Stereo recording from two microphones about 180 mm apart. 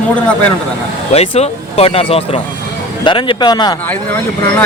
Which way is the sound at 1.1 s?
35° left (ahead or behind).